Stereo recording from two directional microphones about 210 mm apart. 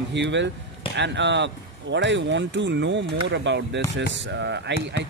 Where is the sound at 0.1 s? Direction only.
60° right (ahead or behind).